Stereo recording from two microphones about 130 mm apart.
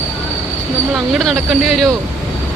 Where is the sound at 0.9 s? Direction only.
Centre (ahead or behind).